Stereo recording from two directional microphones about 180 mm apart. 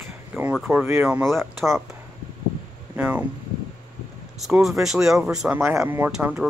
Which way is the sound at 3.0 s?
10° right (ahead or behind).